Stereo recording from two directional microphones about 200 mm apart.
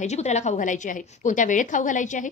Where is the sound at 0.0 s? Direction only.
35° left (ahead or behind).